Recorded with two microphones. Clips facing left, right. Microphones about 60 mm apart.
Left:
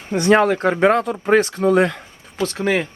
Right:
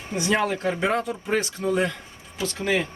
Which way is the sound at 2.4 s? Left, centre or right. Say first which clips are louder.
Left 5 dB; left.